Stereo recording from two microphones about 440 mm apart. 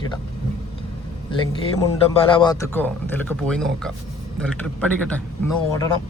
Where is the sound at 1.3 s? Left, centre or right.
Centre.